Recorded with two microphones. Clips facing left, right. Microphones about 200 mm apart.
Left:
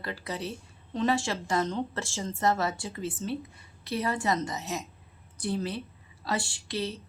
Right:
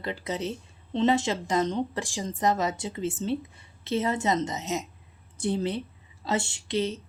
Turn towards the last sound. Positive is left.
turn(degrees=-20)  # may be behind; listen again after turning